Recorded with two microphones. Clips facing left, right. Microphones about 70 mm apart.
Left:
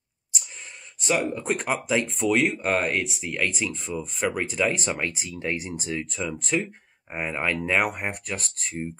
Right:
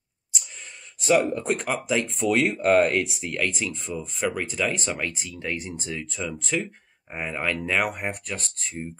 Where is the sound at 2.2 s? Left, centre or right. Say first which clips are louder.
Right 3 dB; centre.